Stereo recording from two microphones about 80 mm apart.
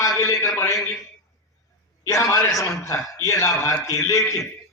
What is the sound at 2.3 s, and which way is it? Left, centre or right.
A man's voice, left.